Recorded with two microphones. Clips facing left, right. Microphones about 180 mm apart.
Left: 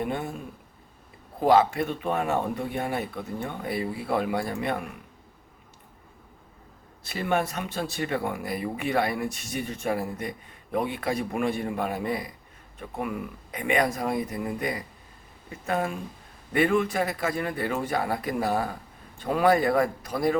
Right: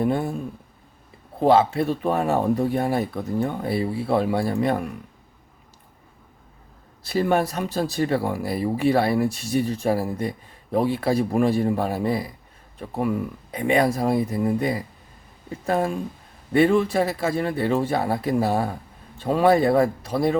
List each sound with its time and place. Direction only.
0.0 s speech: 35° right (ahead or behind)
1.4 s speech: 30° right (ahead or behind)
7.0 s a man's voice: 35° right (ahead or behind)